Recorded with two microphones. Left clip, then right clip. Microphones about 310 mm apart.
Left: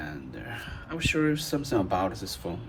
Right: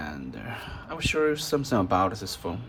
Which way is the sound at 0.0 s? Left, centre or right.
Centre.